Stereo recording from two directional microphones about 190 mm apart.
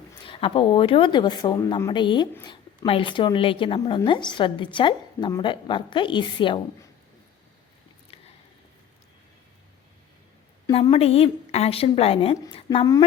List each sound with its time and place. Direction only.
0.3 s a woman's voice: 30° left (ahead or behind)
10.8 s a woman's voice: 30° left (ahead or behind)